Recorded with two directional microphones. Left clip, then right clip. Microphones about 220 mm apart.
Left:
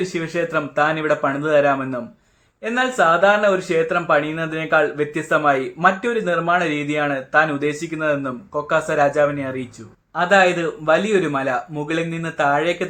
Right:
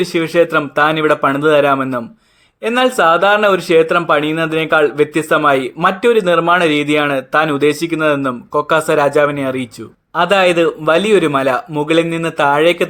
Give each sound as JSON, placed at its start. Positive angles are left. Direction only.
{"t": 0.0, "sound": "a man's voice", "side_deg": -50}